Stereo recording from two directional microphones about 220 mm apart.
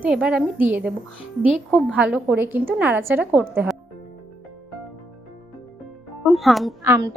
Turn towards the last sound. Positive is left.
turn(degrees=-15)  # may be behind; listen again after turning